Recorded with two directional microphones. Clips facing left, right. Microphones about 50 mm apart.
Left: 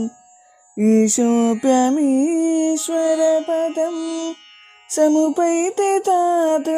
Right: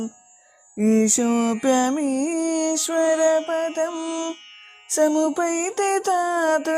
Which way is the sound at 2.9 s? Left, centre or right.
Right.